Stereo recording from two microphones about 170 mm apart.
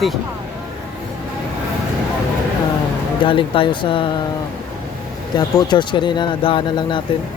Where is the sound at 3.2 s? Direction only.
30° left (ahead or behind).